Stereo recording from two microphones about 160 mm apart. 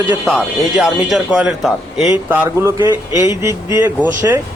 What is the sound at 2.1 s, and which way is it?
A man's voice, 15° right (ahead or behind).